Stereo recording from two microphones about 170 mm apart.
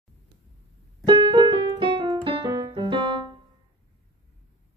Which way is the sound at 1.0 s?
30° right (ahead or behind).